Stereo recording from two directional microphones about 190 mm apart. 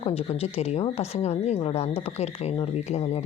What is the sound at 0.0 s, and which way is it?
Speech, 30° left (ahead or behind).